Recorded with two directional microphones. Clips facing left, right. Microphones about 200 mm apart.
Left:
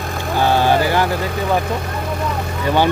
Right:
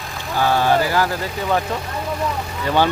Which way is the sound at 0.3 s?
25° left (ahead or behind).